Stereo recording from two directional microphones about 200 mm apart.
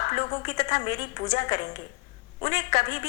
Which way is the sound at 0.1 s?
25° left (ahead or behind).